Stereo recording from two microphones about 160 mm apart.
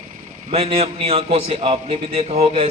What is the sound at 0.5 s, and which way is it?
A man's voice, 40° right (ahead or behind).